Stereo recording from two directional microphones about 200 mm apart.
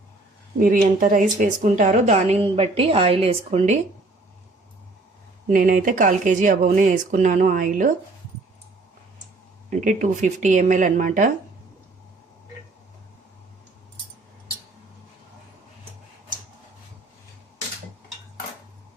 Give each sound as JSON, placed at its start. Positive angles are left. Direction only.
{"t": 0.6, "sound": "a woman's voice", "side_deg": -45}
{"t": 5.5, "sound": "a woman's voice", "side_deg": -40}
{"t": 9.6, "sound": "a woman's voice", "side_deg": -40}